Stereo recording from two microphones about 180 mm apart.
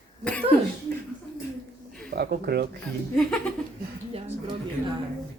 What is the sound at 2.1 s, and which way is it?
Speech, 60° right (ahead or behind).